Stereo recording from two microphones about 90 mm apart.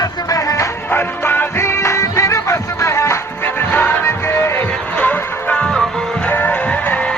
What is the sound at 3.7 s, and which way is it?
Music, 20° left (ahead or behind).